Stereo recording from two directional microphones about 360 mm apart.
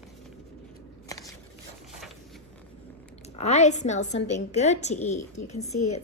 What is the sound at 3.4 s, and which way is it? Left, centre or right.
A woman's voice, centre.